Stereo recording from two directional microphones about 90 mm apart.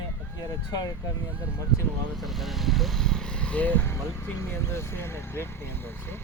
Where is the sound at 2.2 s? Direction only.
Centre (ahead or behind).